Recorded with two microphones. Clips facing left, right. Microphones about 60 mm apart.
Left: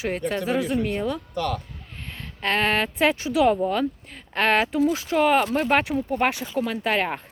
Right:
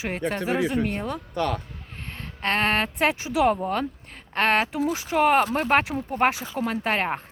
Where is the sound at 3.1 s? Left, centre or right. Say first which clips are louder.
Left 2 dB; right.